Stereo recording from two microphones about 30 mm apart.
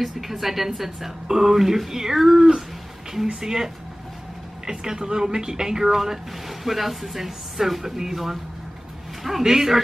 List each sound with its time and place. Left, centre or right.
0.0 s speech: centre
9.4 s speech: centre